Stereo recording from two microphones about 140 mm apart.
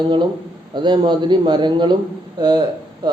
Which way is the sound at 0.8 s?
30° right (ahead or behind).